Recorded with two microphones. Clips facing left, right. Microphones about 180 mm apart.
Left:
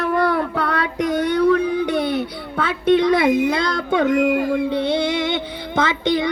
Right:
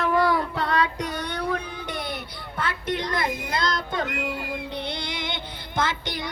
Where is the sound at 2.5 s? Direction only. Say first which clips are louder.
Left 11 dB; 70° left (ahead or behind).